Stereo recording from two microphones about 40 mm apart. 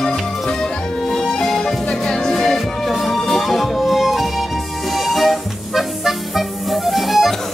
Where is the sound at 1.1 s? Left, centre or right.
Centre.